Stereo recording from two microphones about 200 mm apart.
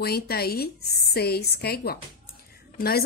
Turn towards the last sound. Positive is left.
turn(degrees=50)  # may be behind; listen again after turning